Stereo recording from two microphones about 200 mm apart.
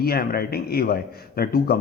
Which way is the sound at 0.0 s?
50° left (ahead or behind).